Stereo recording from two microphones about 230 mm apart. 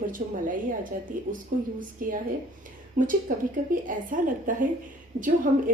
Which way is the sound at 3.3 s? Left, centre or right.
Right.